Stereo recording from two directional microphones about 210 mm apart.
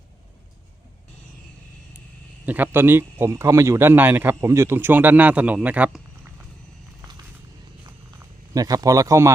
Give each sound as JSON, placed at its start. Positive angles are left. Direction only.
{"t": 2.5, "sound": "speech", "side_deg": -10}
{"t": 8.5, "sound": "speech", "side_deg": -15}